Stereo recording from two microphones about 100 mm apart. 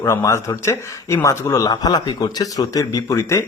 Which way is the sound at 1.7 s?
40° left (ahead or behind).